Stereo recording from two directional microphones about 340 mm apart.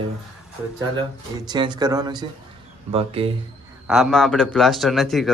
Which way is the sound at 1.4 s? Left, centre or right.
Centre.